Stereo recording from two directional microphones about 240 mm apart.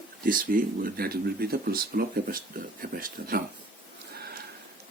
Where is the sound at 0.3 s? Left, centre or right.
Right.